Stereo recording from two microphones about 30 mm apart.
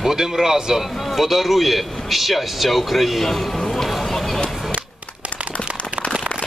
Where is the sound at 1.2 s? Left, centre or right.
Centre.